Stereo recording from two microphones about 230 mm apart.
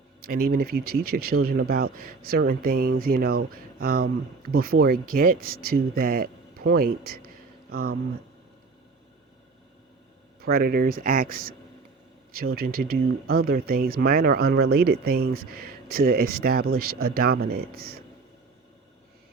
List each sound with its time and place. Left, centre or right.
0.3 s speech: right
7.7 s speech: right
10.4 s speech: right
12.5 s speech: right